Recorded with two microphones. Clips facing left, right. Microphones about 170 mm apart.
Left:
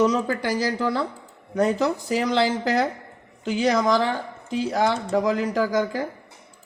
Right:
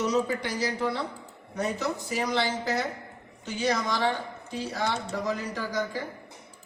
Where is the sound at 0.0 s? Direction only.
90° left.